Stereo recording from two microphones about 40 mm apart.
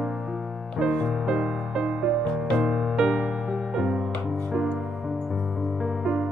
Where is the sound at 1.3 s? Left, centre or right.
Right.